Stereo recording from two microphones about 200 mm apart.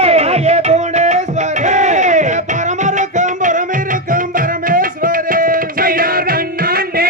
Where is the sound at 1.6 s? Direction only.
35° right (ahead or behind).